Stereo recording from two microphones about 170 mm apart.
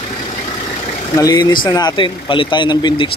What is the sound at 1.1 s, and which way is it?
Speech, 20° left (ahead or behind).